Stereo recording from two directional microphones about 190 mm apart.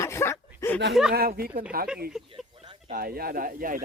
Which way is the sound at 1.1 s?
55° right (ahead or behind).